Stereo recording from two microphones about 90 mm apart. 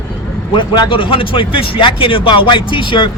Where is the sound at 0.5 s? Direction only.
60° left (ahead or behind).